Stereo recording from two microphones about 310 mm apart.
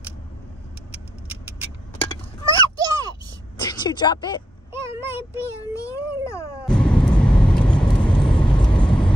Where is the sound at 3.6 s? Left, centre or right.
Centre.